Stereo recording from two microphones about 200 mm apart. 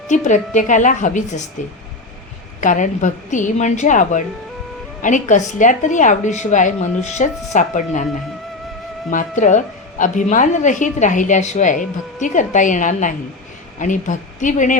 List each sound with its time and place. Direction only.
0.1 s a woman's voice: 40° left (ahead or behind)
2.6 s a woman's voice: 40° left (ahead or behind)
9.0 s a woman's voice: 40° left (ahead or behind)